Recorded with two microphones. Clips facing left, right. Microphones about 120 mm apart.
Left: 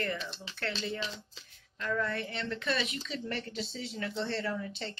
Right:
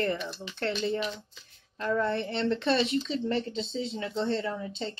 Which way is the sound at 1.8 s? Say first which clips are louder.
Right 5 dB; 30° right (ahead or behind).